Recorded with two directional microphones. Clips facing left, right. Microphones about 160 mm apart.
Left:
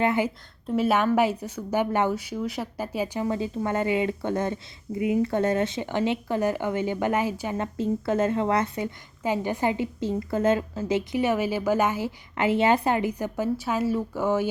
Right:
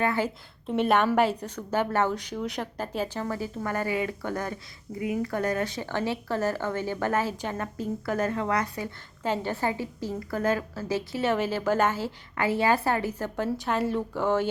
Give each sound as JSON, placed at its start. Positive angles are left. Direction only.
{"t": 0.0, "sound": "a woman's voice", "side_deg": 20}
{"t": 0.7, "sound": "a woman's voice", "side_deg": 5}
{"t": 7.8, "sound": "a woman's voice", "side_deg": 25}